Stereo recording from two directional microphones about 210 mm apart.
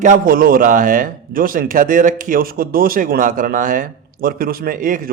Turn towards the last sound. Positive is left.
turn(degrees=-40)  # may be behind; listen again after turning